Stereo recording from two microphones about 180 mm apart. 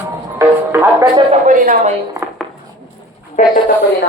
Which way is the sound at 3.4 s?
40° left (ahead or behind).